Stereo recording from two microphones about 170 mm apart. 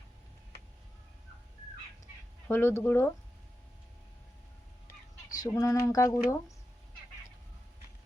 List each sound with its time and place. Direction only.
2.5 s speech: 15° left (ahead or behind)
5.3 s speech: 20° left (ahead or behind)